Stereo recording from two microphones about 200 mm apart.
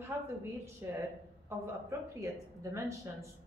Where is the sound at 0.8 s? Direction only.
15° right (ahead or behind).